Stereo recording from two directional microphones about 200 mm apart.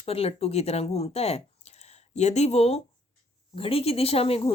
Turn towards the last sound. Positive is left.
turn(degrees=30)  # may be behind; listen again after turning